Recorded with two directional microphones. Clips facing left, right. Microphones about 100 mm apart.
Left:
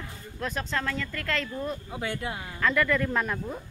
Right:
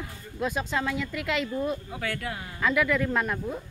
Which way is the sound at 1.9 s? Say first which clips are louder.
Even; 25° left (ahead or behind).